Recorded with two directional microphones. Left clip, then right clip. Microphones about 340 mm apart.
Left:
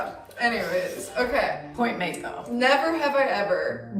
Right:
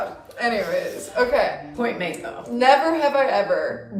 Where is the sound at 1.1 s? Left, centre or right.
Centre.